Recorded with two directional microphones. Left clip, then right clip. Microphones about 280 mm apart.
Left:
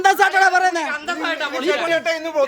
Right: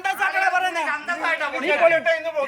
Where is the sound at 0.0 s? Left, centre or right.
Centre.